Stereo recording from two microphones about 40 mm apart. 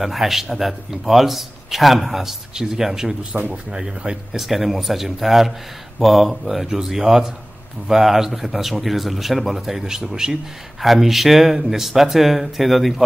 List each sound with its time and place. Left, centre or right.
0.0 s a man's voice: centre
4.3 s a man's voice: centre
10.8 s a man's voice: centre